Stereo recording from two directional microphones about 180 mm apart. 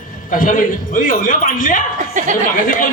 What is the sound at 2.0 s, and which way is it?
Chuckle, 40° right (ahead or behind).